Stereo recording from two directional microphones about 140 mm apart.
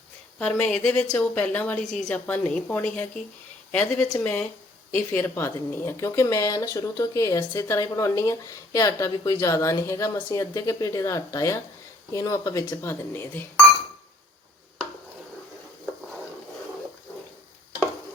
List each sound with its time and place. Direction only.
0.3 s a woman's voice: 10° left (ahead or behind)